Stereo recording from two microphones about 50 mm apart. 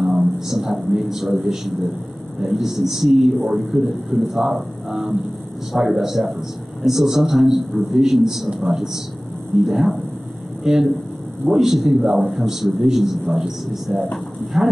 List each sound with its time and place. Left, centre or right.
0.0 s a man's voice: centre